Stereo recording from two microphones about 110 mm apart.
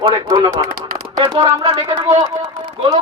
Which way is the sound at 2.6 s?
50° right (ahead or behind).